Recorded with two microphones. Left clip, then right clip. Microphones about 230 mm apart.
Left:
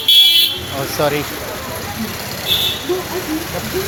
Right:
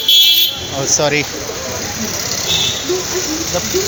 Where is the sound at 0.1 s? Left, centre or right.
Left.